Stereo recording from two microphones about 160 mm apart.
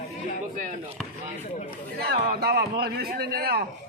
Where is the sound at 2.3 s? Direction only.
80° right.